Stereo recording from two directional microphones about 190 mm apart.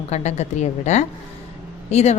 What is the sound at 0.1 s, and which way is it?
A woman's voice, 35° left (ahead or behind).